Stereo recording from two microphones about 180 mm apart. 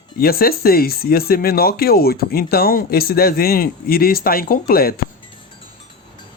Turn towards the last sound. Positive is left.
turn(degrees=55)  # may be behind; listen again after turning